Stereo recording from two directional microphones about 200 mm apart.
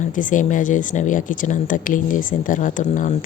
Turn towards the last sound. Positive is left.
turn(degrees=40)  # may be behind; listen again after turning